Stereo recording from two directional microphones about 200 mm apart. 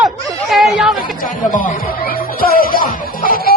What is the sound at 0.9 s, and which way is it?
Speech, 45° left (ahead or behind).